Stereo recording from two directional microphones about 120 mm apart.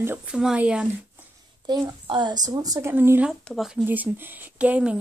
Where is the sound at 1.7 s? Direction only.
40° right (ahead or behind).